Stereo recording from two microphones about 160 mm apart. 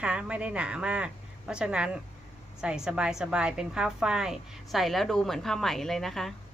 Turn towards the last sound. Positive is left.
turn(degrees=0)  # may be behind; listen again after turning